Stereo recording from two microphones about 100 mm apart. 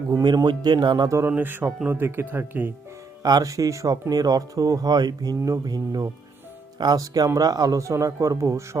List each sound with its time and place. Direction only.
0.1 s speech: 40° right (ahead or behind)
1.3 s speech: 20° right (ahead or behind)
3.2 s speech: 40° right (ahead or behind)